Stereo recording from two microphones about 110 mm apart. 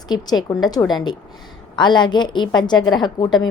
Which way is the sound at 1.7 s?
45° left (ahead or behind).